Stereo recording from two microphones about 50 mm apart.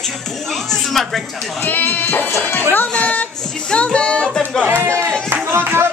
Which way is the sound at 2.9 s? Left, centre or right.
Left.